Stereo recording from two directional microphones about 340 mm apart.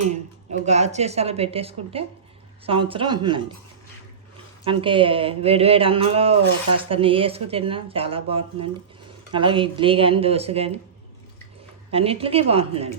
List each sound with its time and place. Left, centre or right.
0.0 s a woman's voice: centre
4.6 s a woman's voice: centre
11.9 s a woman's voice: centre